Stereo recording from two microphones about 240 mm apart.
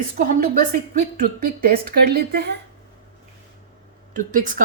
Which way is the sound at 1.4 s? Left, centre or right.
Right.